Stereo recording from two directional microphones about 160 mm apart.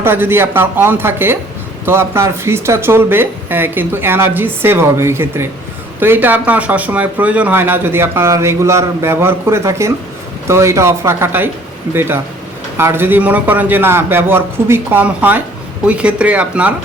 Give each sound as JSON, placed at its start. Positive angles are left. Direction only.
{"t": 0.0, "sound": "speech", "side_deg": -15}